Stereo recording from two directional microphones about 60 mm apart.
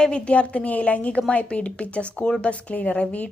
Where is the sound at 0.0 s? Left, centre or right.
Centre.